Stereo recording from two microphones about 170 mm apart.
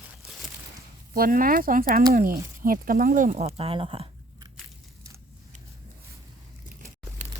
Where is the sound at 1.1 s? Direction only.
60° right (ahead or behind); by 4.0 s 30° right (ahead or behind).